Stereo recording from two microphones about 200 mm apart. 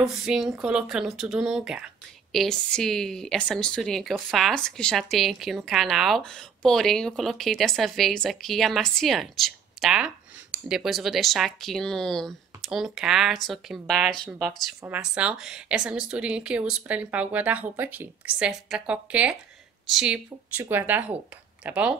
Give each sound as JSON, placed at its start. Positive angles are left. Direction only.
{"t": 0.0, "sound": "a woman's voice", "side_deg": 0}